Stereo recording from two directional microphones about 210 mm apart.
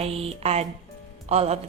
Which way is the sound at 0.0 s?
30° right (ahead or behind).